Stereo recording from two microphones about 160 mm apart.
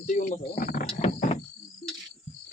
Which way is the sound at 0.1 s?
55° left (ahead or behind).